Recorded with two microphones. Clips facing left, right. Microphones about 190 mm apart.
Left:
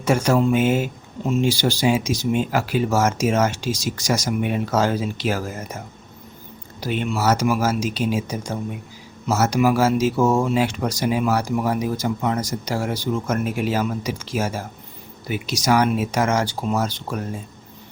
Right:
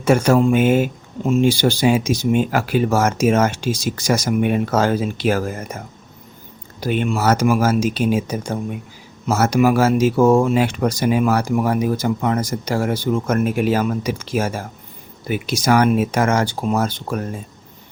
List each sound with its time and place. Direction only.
0.0 s speech: 55° right (ahead or behind)
6.7 s speech: 55° right (ahead or behind)